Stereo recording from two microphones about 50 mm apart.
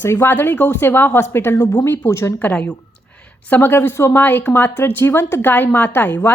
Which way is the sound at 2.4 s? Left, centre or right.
Left.